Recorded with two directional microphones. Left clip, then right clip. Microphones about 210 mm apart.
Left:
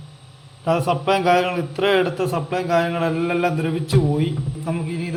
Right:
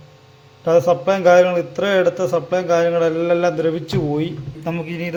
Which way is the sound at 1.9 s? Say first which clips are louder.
Right 4 dB; 25° right (ahead or behind).